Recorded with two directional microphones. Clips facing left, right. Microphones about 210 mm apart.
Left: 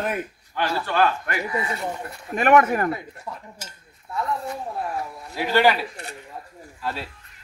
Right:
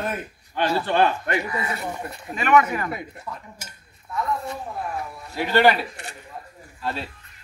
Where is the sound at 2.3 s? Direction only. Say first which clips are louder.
Left 2 dB; 50° left (ahead or behind).